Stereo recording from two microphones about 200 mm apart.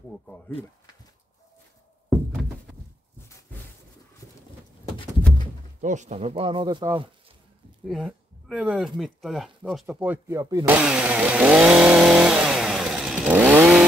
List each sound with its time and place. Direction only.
5.8 s speech: 40° right (ahead or behind); by 7.1 s 20° right (ahead or behind)
7.9 s speech: centre (ahead or behind)
10.8 s chainsaw: 5° right (ahead or behind)